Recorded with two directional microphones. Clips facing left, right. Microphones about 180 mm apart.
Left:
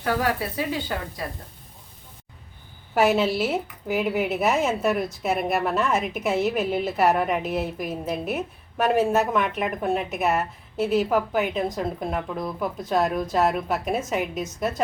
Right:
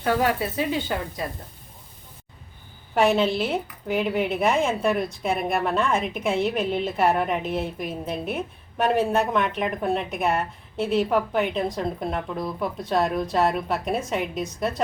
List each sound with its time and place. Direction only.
0.0 s speech: 25° right (ahead or behind)
2.9 s speech: 5° left (ahead or behind)